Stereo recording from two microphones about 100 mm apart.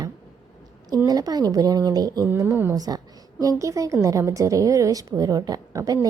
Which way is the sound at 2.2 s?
25° right (ahead or behind).